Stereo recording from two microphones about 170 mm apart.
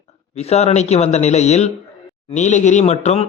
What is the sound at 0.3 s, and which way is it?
A man's voice, 40° left (ahead or behind).